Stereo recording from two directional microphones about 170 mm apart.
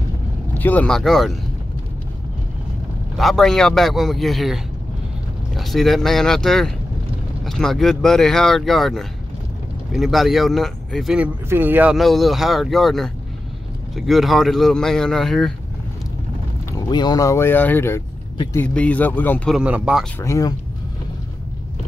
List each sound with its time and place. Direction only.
0.6 s speech: 10° left (ahead or behind)
3.2 s speech: centre (ahead or behind)
11.4 s speech: 10° right (ahead or behind)
16.7 s speech: 25° left (ahead or behind)
19.5 s speech: 5° right (ahead or behind)
20.2 s speech: 20° left (ahead or behind)